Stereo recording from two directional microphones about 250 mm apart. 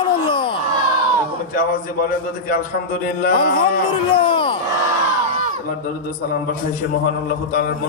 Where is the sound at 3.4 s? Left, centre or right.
Left.